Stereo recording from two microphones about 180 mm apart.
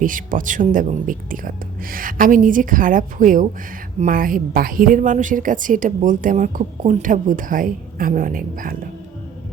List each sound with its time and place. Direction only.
0.0 s a woman's voice: 50° right (ahead or behind)